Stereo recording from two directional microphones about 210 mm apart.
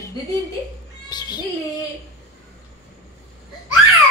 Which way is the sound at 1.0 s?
20° left (ahead or behind).